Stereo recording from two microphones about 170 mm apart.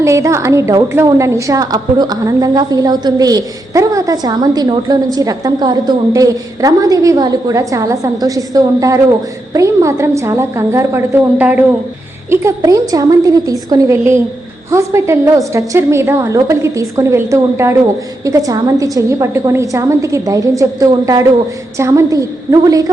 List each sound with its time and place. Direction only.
0.0 s a woman's voice: 15° right (ahead or behind)